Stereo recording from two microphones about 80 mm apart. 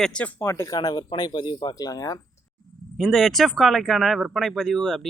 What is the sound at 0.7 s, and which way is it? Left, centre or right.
Speech, left.